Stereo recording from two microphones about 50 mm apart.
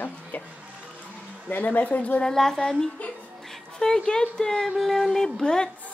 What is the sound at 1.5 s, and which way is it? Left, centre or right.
Speech, left.